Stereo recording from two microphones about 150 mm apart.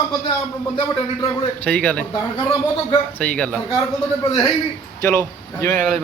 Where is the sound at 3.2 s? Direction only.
10° left (ahead or behind).